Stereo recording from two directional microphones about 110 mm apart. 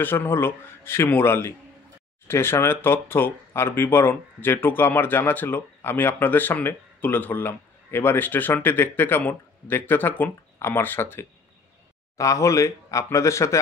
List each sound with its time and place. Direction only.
0.0 s speech: 20° left (ahead or behind)